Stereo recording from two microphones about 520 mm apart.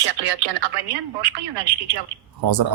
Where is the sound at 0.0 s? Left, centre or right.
Right.